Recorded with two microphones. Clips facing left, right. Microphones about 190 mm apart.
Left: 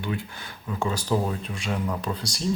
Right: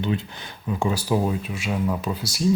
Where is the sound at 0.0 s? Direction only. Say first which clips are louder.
Right 5 dB; 25° right (ahead or behind).